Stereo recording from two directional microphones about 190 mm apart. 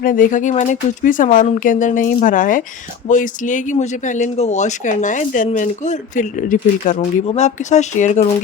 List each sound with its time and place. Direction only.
0.0 s speech: 45° left (ahead or behind)